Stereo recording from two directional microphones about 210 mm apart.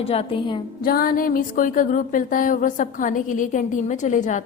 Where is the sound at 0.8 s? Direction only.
45° left (ahead or behind).